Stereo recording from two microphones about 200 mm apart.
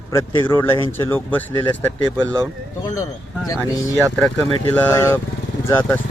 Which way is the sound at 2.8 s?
15° left (ahead or behind).